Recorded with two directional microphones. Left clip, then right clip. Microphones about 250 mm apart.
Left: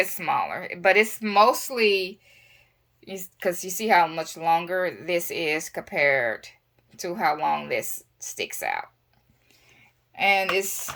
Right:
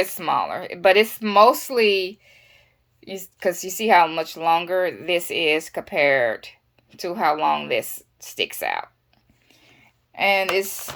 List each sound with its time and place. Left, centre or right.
0.3 s speech: right
0.7 s a woman's voice: centre
9.5 s a sound: centre